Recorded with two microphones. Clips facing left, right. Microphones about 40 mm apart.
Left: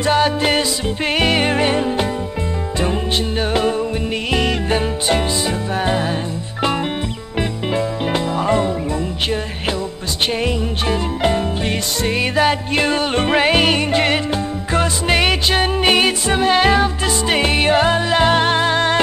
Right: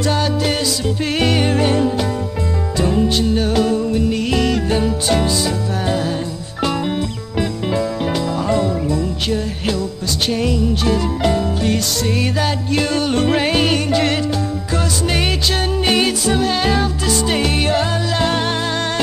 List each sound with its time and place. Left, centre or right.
0.0 s music: left
7.7 s music: left